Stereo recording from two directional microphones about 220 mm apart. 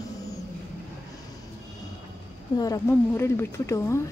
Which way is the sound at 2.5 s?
15° left (ahead or behind).